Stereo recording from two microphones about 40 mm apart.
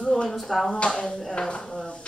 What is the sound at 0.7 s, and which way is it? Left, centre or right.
Speech, centre.